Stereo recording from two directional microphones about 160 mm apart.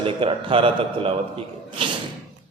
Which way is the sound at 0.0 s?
35° right (ahead or behind).